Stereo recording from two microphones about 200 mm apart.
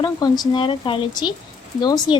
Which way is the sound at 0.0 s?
20° left (ahead or behind).